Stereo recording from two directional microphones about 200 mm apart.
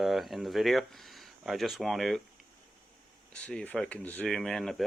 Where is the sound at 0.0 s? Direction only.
Centre (ahead or behind).